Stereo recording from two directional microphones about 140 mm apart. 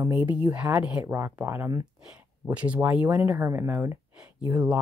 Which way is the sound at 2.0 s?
10° right (ahead or behind).